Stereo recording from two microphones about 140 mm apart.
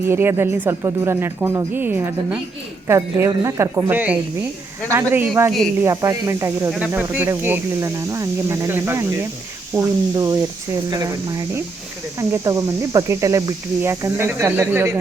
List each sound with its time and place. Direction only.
0.0 s speech: 15° right (ahead or behind)
6.7 s speech: 5° right (ahead or behind)